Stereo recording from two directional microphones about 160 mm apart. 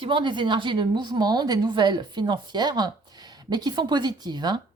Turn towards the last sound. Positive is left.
turn(degrees=-25)  # may be behind; listen again after turning